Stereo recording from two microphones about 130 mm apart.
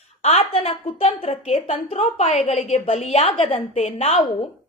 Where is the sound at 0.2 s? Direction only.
50° left (ahead or behind).